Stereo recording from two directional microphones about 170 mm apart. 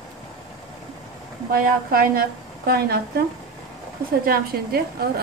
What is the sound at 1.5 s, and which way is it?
A woman's voice, 60° right (ahead or behind).